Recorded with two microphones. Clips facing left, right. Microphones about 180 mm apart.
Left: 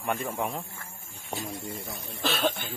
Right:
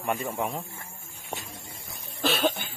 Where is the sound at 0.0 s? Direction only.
5° right (ahead or behind).